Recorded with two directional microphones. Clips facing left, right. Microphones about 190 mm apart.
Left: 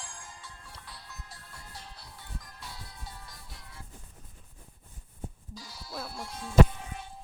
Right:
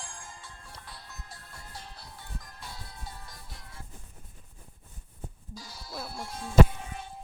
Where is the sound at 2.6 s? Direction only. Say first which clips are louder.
Right 2 dB; 50° right (ahead or behind).